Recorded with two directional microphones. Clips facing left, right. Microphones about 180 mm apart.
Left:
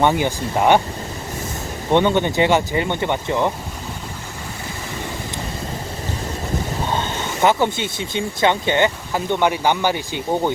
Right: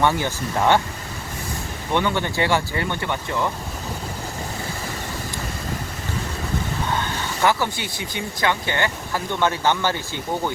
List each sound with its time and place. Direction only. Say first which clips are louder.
0.0 s speech: left 3 dB; 20° left (ahead or behind)
1.9 s speech: left 6 dB; 25° left (ahead or behind)
6.9 s speech: left 3 dB; 20° left (ahead or behind)